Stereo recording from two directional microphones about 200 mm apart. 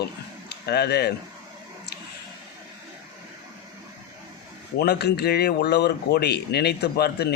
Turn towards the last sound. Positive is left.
turn(degrees=55)  # may be behind; listen again after turning